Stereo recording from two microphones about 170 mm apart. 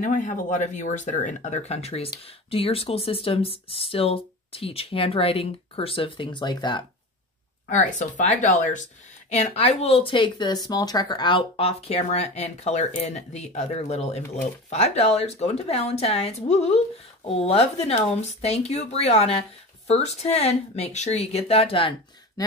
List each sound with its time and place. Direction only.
0.0 s speech: 45° left (ahead or behind); by 6.9 s 25° left (ahead or behind)
7.7 s speech: 45° left (ahead or behind)